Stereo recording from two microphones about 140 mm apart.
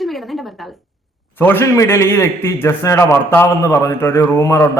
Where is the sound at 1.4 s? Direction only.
15° left (ahead or behind).